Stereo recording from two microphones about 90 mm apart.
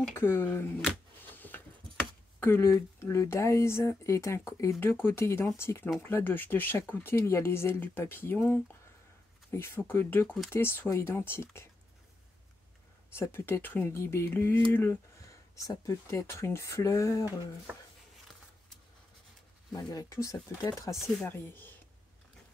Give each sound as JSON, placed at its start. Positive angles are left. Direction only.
{"t": 0.1, "sound": "speech", "side_deg": 25}
{"t": 13.1, "sound": "speech", "side_deg": 25}
{"t": 14.7, "sound": "a sound", "side_deg": 25}
{"t": 15.8, "sound": "speech", "side_deg": 35}
{"t": 17.7, "sound": "speech", "side_deg": -25}
{"t": 19.7, "sound": "speech", "side_deg": 40}
{"t": 21.2, "sound": "speech", "side_deg": 25}